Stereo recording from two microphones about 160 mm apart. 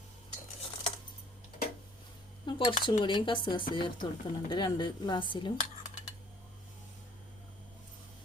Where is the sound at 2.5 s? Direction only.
30° left (ahead or behind).